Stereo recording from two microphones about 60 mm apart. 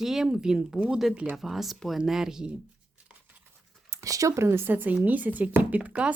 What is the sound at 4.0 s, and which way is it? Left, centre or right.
Speech, right.